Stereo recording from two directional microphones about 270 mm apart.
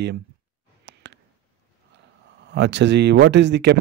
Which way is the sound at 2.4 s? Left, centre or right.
Right.